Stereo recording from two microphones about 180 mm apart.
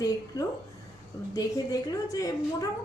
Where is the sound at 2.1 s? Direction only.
20° left (ahead or behind).